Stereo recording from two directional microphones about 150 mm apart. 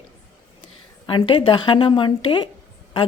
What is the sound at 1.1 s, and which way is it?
Speech, 35° left (ahead or behind).